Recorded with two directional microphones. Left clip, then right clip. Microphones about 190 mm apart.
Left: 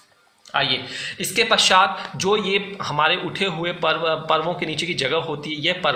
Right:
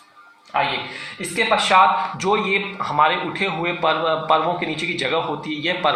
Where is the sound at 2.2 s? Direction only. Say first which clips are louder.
Left 1 dB; 35° left (ahead or behind).